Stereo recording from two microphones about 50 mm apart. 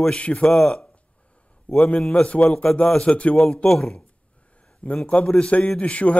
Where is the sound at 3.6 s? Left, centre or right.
Centre.